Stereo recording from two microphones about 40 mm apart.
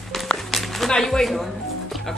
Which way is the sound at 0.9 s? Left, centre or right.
Centre.